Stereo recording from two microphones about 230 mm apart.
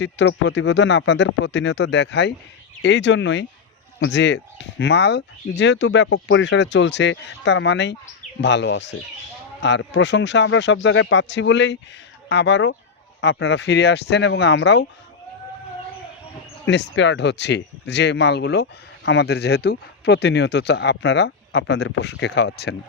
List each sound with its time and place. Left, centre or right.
0.0 s speech: left
16.6 s speech: left